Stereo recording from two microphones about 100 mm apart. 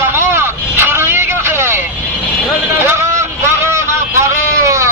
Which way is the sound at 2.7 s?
25° right (ahead or behind).